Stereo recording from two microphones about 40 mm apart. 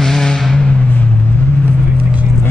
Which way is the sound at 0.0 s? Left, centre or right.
Centre.